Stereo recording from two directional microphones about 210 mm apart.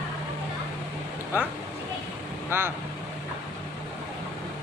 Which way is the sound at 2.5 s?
10° right (ahead or behind).